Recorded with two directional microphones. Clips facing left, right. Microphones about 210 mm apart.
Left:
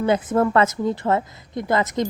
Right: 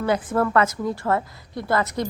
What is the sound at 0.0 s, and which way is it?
A woman's voice, 20° left (ahead or behind).